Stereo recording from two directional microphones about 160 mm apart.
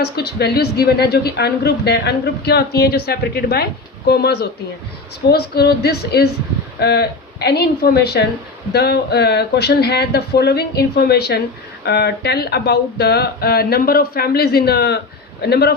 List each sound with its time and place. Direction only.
0.0 s a woman's voice: 90° left
5.3 s a woman's voice: 80° left